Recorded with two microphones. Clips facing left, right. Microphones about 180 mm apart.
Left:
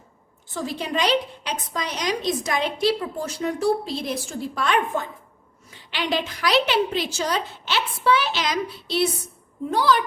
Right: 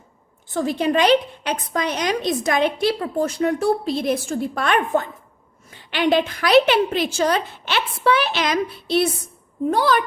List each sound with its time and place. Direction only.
0.5 s a woman's voice: 55° right (ahead or behind)